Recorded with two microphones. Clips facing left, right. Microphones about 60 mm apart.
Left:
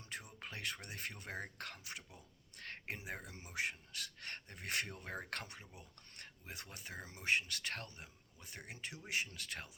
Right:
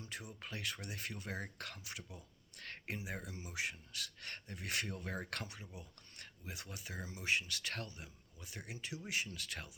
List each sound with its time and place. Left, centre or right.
0.0 s speech: left